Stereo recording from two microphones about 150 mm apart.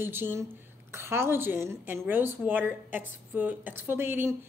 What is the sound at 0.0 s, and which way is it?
A woman's voice, 15° right (ahead or behind).